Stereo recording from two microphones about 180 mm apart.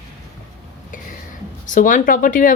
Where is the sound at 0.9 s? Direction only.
45° left (ahead or behind).